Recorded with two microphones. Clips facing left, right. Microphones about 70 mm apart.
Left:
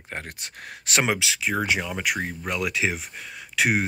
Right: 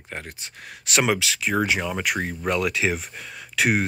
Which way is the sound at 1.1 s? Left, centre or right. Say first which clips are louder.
Right 2 dB; centre.